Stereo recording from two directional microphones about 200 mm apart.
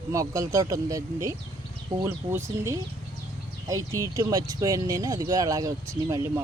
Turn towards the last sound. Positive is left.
turn(degrees=-15)  # may be behind; listen again after turning